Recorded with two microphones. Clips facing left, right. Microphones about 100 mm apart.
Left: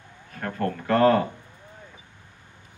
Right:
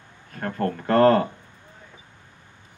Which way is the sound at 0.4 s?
35° right (ahead or behind).